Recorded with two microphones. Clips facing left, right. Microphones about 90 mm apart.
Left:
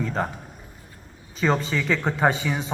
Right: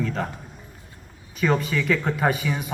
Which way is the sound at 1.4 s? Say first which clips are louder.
Even; 25° left (ahead or behind).